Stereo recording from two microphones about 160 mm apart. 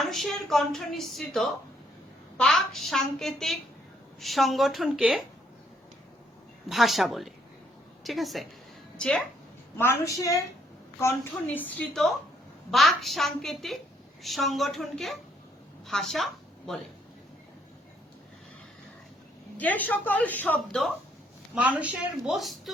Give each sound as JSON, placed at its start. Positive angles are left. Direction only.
{"t": 0.0, "sound": "a woman's voice", "side_deg": 0}
{"t": 6.7, "sound": "a woman's voice", "side_deg": 0}
{"t": 9.7, "sound": "a woman's voice", "side_deg": 15}
{"t": 19.5, "sound": "a woman's voice", "side_deg": 10}
{"t": 21.5, "sound": "a woman's voice", "side_deg": -5}